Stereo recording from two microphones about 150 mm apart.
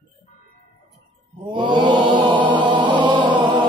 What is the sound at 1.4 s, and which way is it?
Mantra, 30° right (ahead or behind).